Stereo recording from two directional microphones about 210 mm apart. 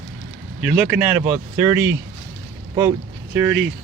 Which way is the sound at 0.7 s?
10° right (ahead or behind).